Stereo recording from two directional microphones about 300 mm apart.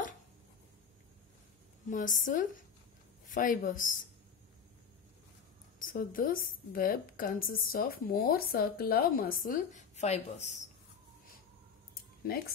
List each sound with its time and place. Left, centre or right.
1.9 s a woman's voice: left
5.8 s a woman's voice: left
12.3 s speech: left